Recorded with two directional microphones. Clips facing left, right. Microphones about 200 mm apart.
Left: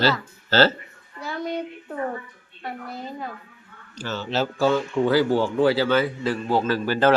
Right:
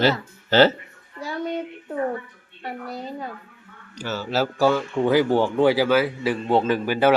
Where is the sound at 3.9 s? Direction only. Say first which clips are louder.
Right 1 dB; 10° right (ahead or behind).